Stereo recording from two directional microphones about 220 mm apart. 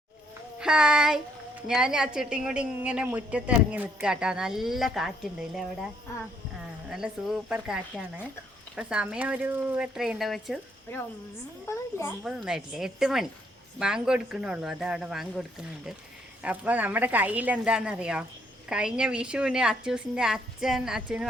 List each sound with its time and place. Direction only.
0.6 s speech: 5° right (ahead or behind)
6.9 s speech: 5° right (ahead or behind)
11.7 s a child's voice: 10° left (ahead or behind)
12.2 s a woman's voice: centre (ahead or behind)